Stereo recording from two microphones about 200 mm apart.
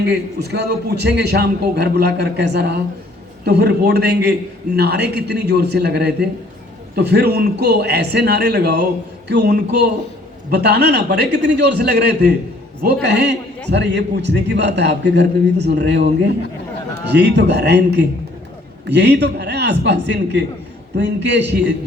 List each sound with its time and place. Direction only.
0.0 s a man's voice: 55° right (ahead or behind)
17.1 s a man's voice: 60° right (ahead or behind)